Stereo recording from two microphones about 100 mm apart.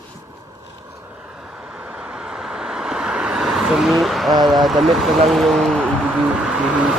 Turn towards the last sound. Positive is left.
turn(degrees=-10)  # may be behind; listen again after turning